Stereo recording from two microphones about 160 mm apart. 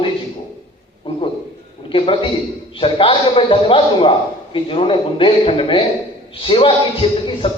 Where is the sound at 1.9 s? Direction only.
35° left (ahead or behind).